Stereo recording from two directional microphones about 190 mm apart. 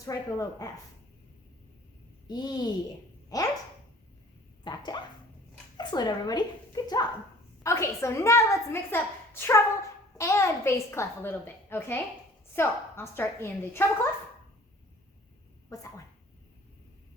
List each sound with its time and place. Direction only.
0.0 s a woman's voice: 15° left (ahead or behind)
2.3 s speech: 20° left (ahead or behind)
4.6 s a woman's voice: 20° left (ahead or behind)
15.7 s a woman's voice: 20° left (ahead or behind)